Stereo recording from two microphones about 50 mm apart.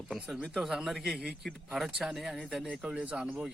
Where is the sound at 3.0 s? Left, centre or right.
Right.